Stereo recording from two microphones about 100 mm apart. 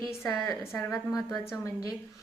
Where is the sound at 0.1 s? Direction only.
25° left (ahead or behind).